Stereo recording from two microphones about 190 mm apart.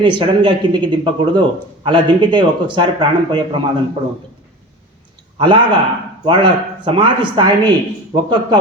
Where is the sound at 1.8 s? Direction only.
25° right (ahead or behind).